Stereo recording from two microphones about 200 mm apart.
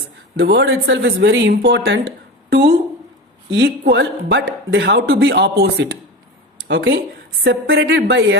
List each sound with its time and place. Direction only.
0.3 s speech: 55° right (ahead or behind)
6.7 s speech: 65° right (ahead or behind)
7.8 s speech: 55° right (ahead or behind)